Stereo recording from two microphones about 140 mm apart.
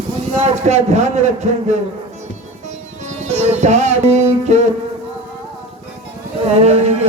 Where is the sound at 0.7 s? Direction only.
55° right (ahead or behind).